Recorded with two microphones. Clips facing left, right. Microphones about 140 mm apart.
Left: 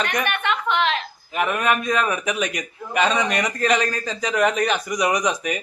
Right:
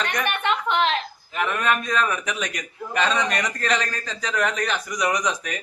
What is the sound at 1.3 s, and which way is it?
A man's voice, 10° left (ahead or behind).